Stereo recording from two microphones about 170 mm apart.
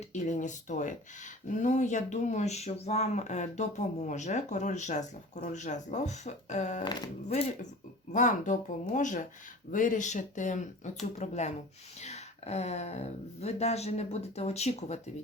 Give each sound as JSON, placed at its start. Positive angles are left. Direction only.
{"t": 0.1, "sound": "speech", "side_deg": 45}
{"t": 8.1, "sound": "speech", "side_deg": 50}